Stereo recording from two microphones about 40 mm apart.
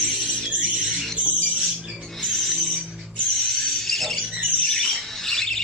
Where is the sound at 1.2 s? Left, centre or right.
Right.